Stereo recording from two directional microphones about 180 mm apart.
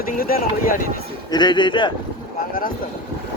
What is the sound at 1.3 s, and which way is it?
Speech, 25° left (ahead or behind).